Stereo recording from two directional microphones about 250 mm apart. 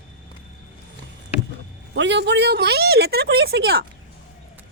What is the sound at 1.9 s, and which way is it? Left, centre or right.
A woman's voice, right.